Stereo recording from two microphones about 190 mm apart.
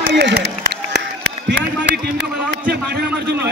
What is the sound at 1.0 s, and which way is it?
Run, 60° right (ahead or behind).